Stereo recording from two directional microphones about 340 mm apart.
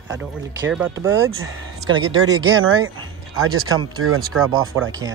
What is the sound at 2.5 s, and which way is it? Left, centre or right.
Speech, right.